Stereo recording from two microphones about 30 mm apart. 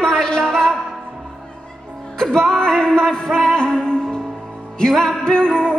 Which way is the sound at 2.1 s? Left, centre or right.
Left.